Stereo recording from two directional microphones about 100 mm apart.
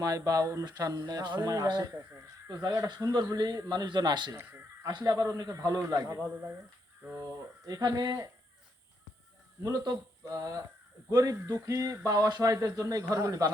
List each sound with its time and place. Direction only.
0.0 s a man's voice: 35° right (ahead or behind)
4.3 s a sound: 30° right (ahead or behind)
5.0 s a man's voice: 35° right (ahead or behind)
7.2 s speech: 25° right (ahead or behind)
7.8 s a man's voice: 40° right (ahead or behind)
9.6 s a man's voice: 40° right (ahead or behind)